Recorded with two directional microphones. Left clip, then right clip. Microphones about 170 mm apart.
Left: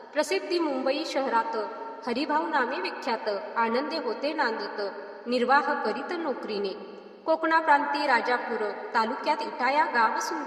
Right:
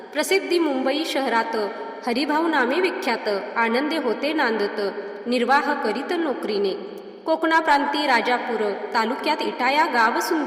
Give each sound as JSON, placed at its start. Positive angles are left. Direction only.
{"t": 0.2, "sound": "a woman's voice", "side_deg": -30}
{"t": 7.3, "sound": "a woman's voice", "side_deg": -30}